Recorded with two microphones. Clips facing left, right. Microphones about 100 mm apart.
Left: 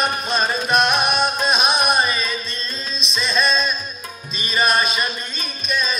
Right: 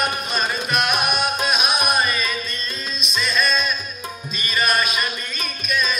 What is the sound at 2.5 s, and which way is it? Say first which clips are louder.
Music: even; 30° left (ahead or behind).